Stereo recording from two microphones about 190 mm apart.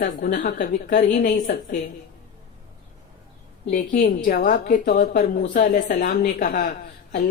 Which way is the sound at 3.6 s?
45° left (ahead or behind).